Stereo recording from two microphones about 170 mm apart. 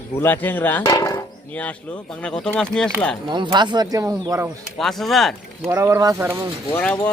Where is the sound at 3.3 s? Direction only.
25° right (ahead or behind).